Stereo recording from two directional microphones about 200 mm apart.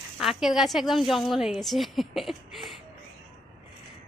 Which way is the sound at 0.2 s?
Centre (ahead or behind).